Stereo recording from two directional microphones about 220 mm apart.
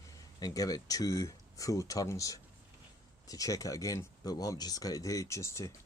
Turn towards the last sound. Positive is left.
turn(degrees=15)  # may be behind; listen again after turning